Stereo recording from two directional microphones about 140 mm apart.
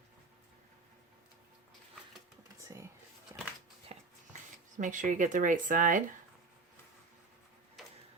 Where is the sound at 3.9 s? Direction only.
50° right (ahead or behind).